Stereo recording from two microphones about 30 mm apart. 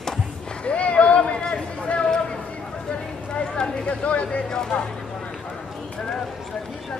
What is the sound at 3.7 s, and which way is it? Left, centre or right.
Speech, left.